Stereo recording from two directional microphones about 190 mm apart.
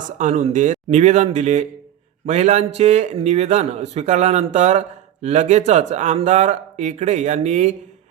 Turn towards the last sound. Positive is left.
turn(degrees=-40)  # may be behind; listen again after turning